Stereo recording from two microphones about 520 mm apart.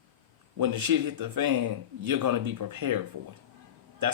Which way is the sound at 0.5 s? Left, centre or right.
Right.